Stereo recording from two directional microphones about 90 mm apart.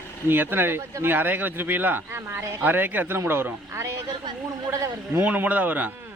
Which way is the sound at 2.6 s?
20° right (ahead or behind).